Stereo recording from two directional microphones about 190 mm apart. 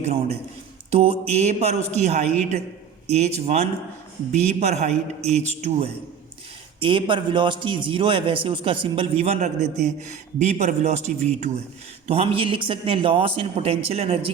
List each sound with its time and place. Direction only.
0.0 s a man's voice: 35° right (ahead or behind)